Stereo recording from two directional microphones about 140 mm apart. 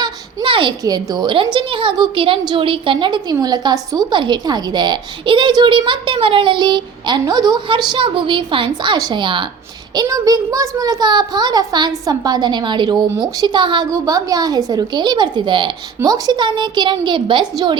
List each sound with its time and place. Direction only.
0.0 s a woman's voice: 35° right (ahead or behind)